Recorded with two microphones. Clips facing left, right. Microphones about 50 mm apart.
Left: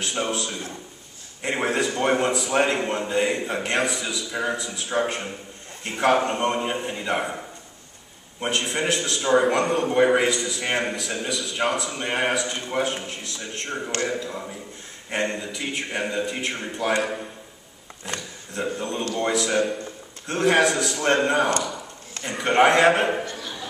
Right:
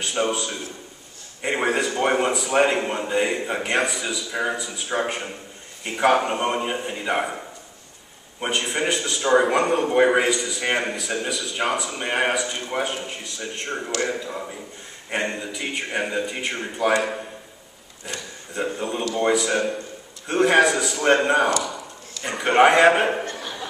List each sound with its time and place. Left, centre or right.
0.0 s a man's voice: centre
8.4 s a man's voice: centre
18.5 s a man's voice: centre
23.3 s a sound: right